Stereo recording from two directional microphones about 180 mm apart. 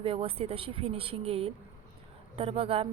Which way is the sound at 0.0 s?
30° right (ahead or behind).